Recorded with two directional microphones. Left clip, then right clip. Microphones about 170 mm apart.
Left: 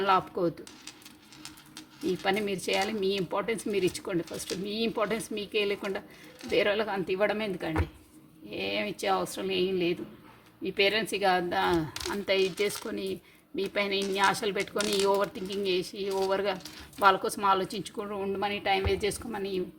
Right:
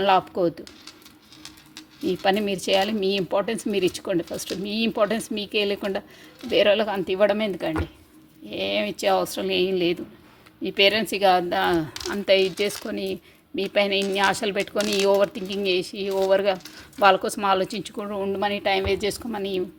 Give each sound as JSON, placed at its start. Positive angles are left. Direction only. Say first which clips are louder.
{"t": 0.0, "sound": "speech", "louder": "right 6 dB", "side_deg": -35}
{"t": 2.0, "sound": "speech", "louder": "right 6 dB", "side_deg": -35}